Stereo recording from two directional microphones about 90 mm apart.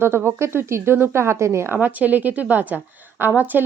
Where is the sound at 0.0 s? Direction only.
25° right (ahead or behind).